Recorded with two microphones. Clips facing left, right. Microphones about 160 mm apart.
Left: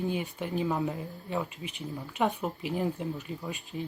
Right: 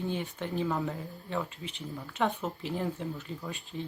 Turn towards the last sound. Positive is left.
turn(degrees=20)  # may be behind; listen again after turning